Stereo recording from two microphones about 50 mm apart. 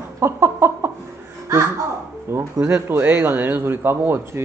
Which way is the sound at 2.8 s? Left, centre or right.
Right.